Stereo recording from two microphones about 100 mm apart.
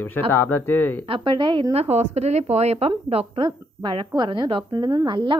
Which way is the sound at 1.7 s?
90° right.